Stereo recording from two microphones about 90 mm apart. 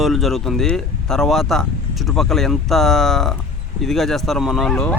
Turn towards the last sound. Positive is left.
turn(degrees=10)  # may be behind; listen again after turning